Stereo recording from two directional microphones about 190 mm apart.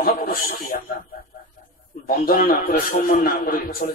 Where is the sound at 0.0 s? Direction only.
50° left (ahead or behind).